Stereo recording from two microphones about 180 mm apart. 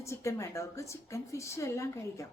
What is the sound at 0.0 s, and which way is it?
A woman's voice, 15° left (ahead or behind).